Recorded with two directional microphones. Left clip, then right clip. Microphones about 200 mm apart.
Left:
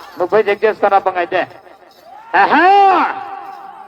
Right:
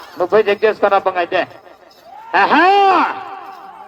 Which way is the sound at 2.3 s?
50° right (ahead or behind).